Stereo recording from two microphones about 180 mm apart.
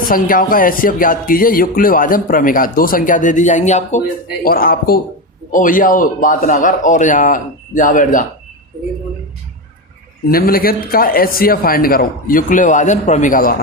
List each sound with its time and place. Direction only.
0.1 s speech: 50° left (ahead or behind)
4.4 s speech: 55° left (ahead or behind)
10.3 s speech: 55° left (ahead or behind)